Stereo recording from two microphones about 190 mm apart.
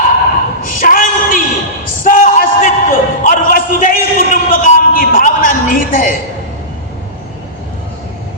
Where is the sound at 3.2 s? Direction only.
45° left (ahead or behind).